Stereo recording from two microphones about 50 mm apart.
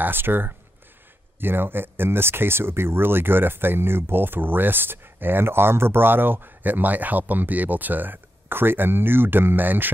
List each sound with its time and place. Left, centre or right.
0.0 s speech: right